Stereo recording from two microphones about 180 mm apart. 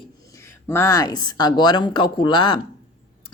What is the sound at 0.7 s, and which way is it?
A woman's voice, 15° left (ahead or behind).